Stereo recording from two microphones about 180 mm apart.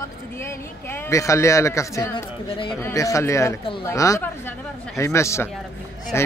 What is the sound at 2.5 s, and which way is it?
Speech, 30° left (ahead or behind).